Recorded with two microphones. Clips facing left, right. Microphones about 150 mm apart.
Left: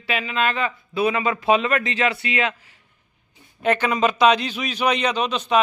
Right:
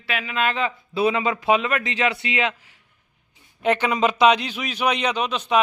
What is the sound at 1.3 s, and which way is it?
A man's voice, 10° right (ahead or behind).